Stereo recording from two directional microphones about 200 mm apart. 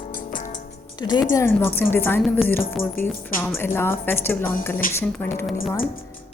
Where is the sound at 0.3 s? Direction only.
40° left (ahead or behind).